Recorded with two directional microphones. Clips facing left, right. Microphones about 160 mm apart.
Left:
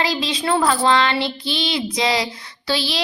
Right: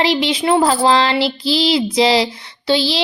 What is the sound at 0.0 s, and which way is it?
Child singing, 25° right (ahead or behind).